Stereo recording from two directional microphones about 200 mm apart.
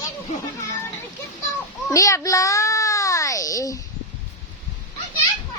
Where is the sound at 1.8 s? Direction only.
15° left (ahead or behind).